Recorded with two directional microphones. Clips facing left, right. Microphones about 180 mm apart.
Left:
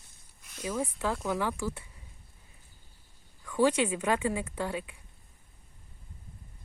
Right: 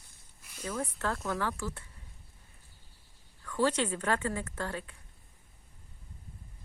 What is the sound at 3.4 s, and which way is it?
A woman's voice, 10° left (ahead or behind).